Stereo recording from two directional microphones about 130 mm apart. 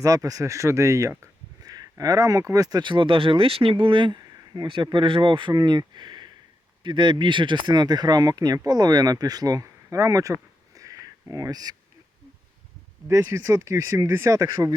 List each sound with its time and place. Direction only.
0.0 s speech: 25° right (ahead or behind)
10.8 s a sound: 25° right (ahead or behind)
13.1 s speech: 20° right (ahead or behind)